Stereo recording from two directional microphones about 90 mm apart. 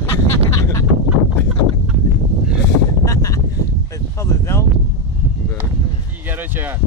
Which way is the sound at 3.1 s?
35° left (ahead or behind).